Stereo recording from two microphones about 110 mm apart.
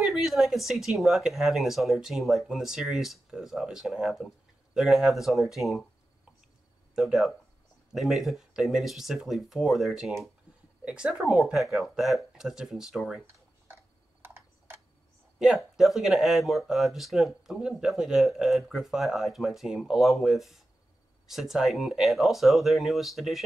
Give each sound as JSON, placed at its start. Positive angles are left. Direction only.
{"t": 0.0, "sound": "speech", "side_deg": 0}
{"t": 7.0, "sound": "speech", "side_deg": 0}
{"t": 14.2, "sound": "tick", "side_deg": -20}
{"t": 15.3, "sound": "speech", "side_deg": -5}